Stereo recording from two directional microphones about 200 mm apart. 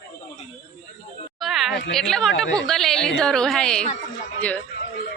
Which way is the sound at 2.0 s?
Centre (ahead or behind).